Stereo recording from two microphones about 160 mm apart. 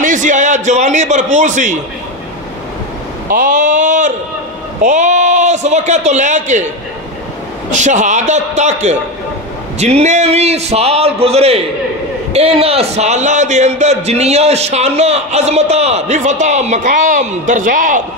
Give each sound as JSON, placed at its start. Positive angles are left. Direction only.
{"t": 0.0, "sound": "a man's voice", "side_deg": -50}
{"t": 3.3, "sound": "a man's voice", "side_deg": -55}
{"t": 7.7, "sound": "a man's voice", "side_deg": -50}